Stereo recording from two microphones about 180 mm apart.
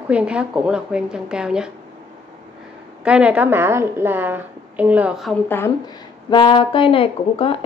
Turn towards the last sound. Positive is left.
turn(degrees=30)  # may be behind; listen again after turning